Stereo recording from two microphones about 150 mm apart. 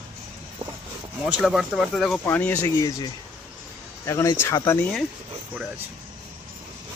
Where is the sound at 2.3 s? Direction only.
10° left (ahead or behind).